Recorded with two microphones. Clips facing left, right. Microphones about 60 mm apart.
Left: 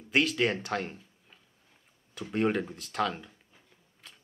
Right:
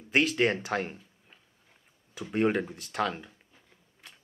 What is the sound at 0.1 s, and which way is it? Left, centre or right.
Speech, centre.